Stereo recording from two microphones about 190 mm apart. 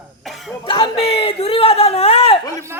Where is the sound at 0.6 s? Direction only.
25° left (ahead or behind).